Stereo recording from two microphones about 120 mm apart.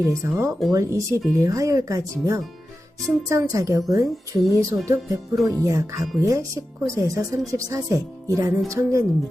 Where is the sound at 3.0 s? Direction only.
25° right (ahead or behind).